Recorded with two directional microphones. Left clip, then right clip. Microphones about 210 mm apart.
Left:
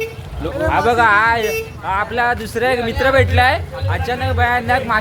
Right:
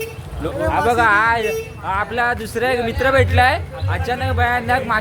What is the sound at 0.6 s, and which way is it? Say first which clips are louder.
Speech: left 2 dB; 5° left (ahead or behind).